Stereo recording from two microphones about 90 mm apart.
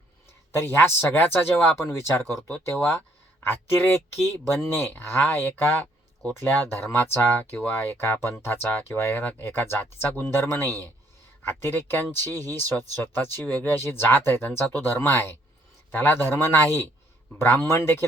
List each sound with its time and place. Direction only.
0.5 s speech: 25° left (ahead or behind)